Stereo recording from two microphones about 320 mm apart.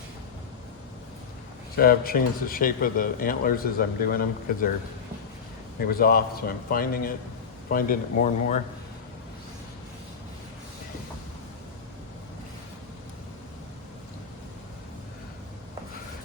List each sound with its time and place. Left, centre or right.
1.7 s speech: left
5.9 s speech: left